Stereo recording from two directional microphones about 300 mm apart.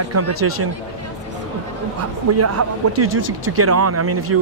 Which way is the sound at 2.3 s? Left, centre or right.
Right.